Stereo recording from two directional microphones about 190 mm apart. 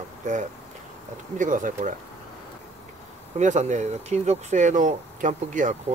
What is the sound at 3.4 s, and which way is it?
Speech, 40° right (ahead or behind).